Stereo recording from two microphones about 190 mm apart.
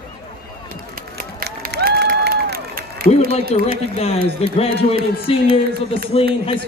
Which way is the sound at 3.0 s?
45° left (ahead or behind).